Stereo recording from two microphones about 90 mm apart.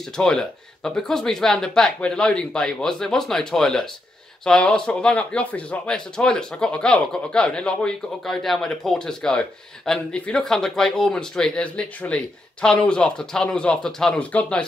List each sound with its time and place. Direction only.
0.0 s a man's voice: 5° left (ahead or behind)